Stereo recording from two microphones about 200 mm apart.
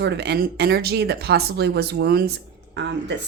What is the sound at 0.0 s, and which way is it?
Speech, 55° right (ahead or behind).